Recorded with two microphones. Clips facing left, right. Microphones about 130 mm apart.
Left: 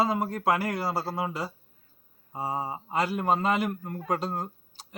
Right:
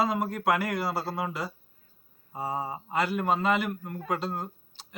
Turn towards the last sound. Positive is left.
turn(degrees=40)  # may be behind; listen again after turning